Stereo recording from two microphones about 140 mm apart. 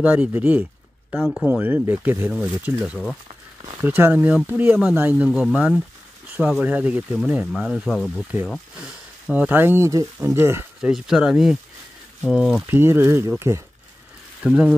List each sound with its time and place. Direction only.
0.0 s speech: 10° right (ahead or behind)
1.1 s speech: centre (ahead or behind)
1.5 s speech: 15° right (ahead or behind)
10.8 s speech: 5° right (ahead or behind)
12.6 s speech: 15° right (ahead or behind)
14.4 s speech: 10° right (ahead or behind)